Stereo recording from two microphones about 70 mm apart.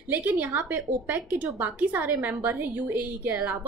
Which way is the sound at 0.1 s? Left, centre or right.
Right.